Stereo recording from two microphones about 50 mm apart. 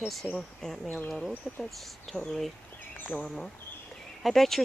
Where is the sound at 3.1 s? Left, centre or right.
Left.